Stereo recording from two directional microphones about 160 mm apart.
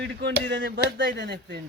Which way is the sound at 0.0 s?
90° right.